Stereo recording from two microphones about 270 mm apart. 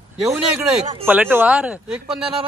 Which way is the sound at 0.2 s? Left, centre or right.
Centre.